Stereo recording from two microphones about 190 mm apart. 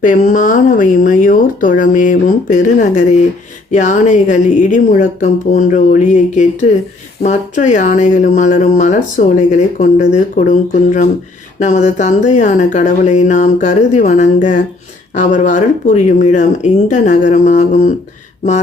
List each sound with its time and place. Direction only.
0.0 s speech: 45° left (ahead or behind)